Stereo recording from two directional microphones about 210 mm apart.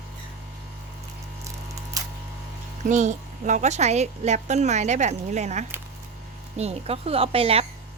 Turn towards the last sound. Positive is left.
turn(degrees=-25)  # may be behind; listen again after turning